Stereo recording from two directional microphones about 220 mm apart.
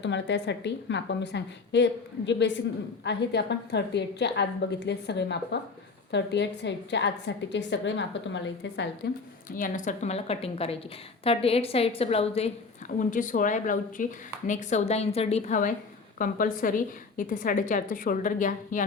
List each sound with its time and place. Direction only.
0.0 s a woman's voice: 50° left (ahead or behind)
9.6 s a woman's voice: 35° left (ahead or behind)